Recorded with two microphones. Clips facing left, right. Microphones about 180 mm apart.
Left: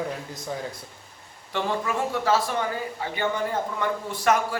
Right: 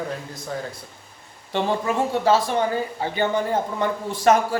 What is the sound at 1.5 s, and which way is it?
A man's voice, 30° right (ahead or behind).